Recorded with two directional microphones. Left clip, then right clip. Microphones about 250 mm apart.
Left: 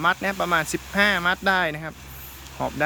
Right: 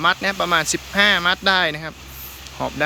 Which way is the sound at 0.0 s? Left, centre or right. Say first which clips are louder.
Right 4 dB; centre.